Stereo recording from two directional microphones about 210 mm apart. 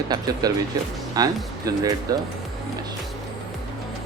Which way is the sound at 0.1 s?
20° right (ahead or behind).